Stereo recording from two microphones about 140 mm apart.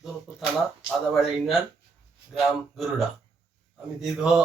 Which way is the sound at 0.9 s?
Centre (ahead or behind).